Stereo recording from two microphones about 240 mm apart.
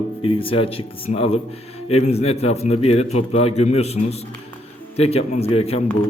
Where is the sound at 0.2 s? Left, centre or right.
Left.